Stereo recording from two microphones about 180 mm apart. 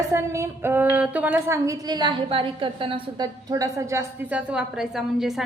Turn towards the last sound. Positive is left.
turn(degrees=0)  # may be behind; listen again after turning